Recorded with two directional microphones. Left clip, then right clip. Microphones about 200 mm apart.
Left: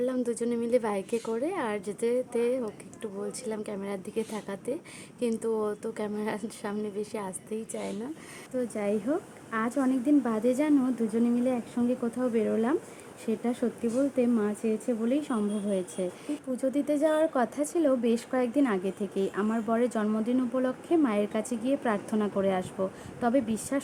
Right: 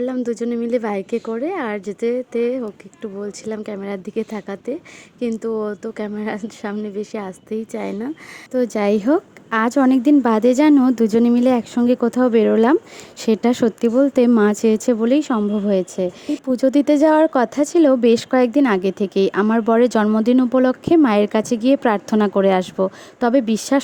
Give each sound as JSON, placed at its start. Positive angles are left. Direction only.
{"t": 0.0, "sound": "a woman's voice", "side_deg": -25}